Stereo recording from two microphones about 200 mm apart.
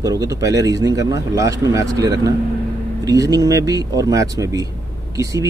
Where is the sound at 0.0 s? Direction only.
15° right (ahead or behind).